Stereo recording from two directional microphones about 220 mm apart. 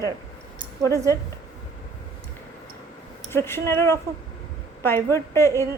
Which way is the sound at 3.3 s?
10° left (ahead or behind).